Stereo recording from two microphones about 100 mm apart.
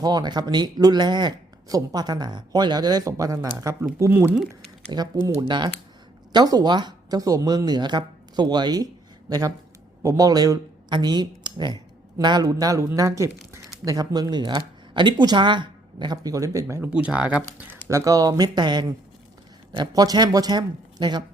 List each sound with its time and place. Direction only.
0.0 s speech: 45° right (ahead or behind)
4.9 s speech: 50° right (ahead or behind)
10.0 s speech: 30° right (ahead or behind)
16.9 s speech: 10° right (ahead or behind)
17.8 s speech: 30° right (ahead or behind)